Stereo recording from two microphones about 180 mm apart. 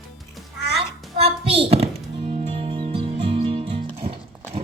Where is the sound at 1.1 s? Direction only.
35° right (ahead or behind).